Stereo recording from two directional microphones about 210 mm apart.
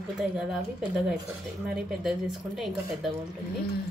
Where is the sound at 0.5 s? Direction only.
5° right (ahead or behind).